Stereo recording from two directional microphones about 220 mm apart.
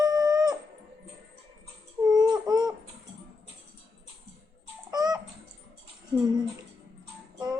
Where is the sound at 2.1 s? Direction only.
20° right (ahead or behind).